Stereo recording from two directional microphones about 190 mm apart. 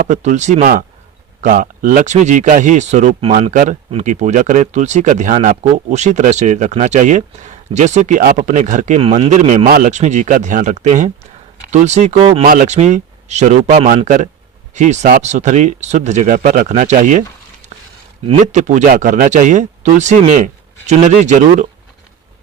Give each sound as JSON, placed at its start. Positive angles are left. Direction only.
{"t": 0.0, "sound": "speech", "side_deg": -40}
{"t": 9.6, "sound": "speech", "side_deg": -50}